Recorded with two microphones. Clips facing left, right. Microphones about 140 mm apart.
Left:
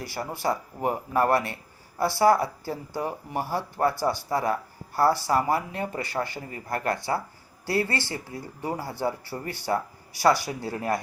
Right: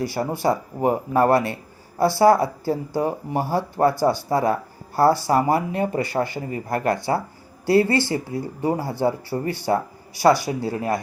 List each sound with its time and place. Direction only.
0.0 s speech: 25° right (ahead or behind)